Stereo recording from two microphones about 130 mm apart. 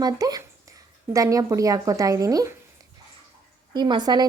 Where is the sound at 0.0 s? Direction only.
30° right (ahead or behind).